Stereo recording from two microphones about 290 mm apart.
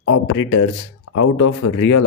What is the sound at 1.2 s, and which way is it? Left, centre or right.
Speech, left.